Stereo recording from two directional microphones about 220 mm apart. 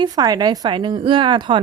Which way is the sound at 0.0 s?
15° right (ahead or behind).